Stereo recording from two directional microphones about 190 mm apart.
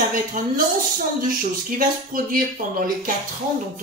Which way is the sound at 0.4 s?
45° right (ahead or behind).